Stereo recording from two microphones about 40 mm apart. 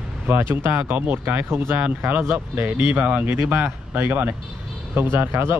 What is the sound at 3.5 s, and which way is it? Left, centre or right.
Speech, right.